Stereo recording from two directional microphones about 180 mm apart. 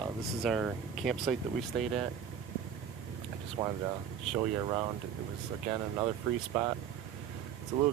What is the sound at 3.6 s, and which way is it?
Speech, 20° right (ahead or behind).